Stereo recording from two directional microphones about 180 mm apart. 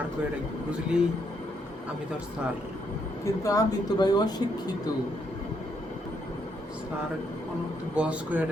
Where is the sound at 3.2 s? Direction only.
20° left (ahead or behind).